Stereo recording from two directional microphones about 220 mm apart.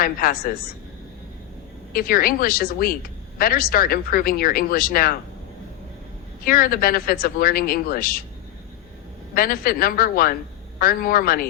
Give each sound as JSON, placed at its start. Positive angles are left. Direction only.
{"t": 0.0, "sound": "a woman's voice", "side_deg": 40}
{"t": 1.9, "sound": "a woman's voice", "side_deg": 40}
{"t": 6.4, "sound": "a woman's voice", "side_deg": 40}
{"t": 9.3, "sound": "a woman's voice", "side_deg": 40}